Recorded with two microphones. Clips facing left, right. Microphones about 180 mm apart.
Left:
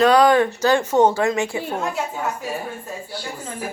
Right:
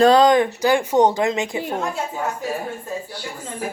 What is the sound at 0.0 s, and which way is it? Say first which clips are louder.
Speech: right 1 dB; 25° right (ahead or behind).